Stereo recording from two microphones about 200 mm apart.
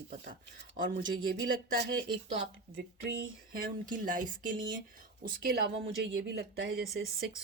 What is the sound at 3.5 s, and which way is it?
A woman's voice, 45° right (ahead or behind).